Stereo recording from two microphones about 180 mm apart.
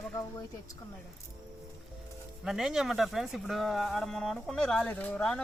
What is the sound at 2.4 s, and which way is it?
Speech, centre (ahead or behind).